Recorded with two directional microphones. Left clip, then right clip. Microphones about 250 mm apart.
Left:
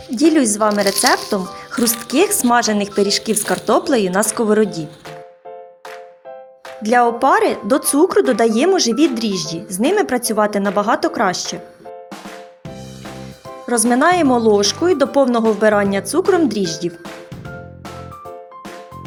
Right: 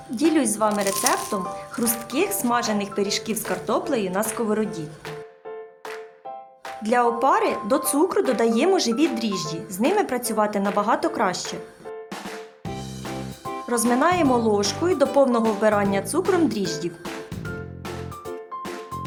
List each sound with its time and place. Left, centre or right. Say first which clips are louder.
0.2 s speech: left 6 dB; centre
6.8 s a woman's voice: left 6 dB; centre
13.7 s a woman's voice: left 6 dB; centre